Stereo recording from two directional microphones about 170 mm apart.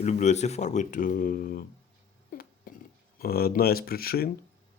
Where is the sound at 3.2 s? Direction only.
65° left (ahead or behind).